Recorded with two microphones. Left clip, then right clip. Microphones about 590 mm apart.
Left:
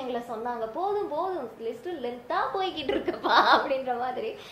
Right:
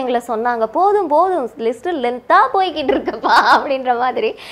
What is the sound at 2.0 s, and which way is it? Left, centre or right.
A woman's voice, right.